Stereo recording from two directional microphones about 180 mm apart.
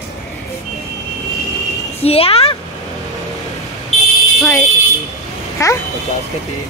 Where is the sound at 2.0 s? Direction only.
35° left (ahead or behind).